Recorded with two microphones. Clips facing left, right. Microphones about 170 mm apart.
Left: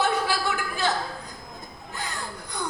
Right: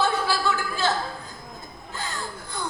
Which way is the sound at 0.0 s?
15° left (ahead or behind).